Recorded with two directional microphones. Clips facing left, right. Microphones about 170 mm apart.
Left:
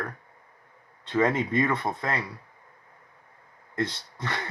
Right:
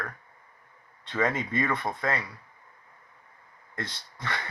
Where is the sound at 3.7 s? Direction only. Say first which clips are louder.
Left 8 dB; 25° left (ahead or behind).